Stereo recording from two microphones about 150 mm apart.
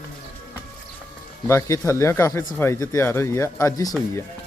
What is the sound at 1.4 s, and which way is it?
Speech, 20° left (ahead or behind).